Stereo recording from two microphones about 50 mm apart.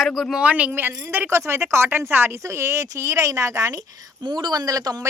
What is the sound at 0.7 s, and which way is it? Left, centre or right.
Speech, right.